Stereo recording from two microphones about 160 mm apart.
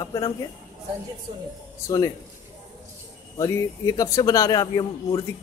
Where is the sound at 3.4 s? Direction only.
25° left (ahead or behind).